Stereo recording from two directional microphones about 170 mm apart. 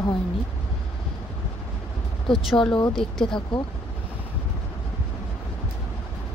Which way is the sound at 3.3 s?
30° left (ahead or behind).